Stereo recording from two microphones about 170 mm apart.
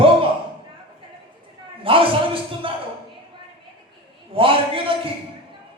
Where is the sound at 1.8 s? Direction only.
30° right (ahead or behind).